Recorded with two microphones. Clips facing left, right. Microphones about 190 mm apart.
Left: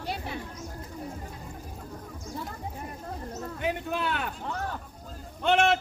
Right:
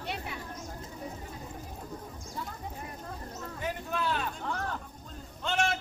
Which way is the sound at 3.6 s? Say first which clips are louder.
Left 3 dB; 65° left (ahead or behind).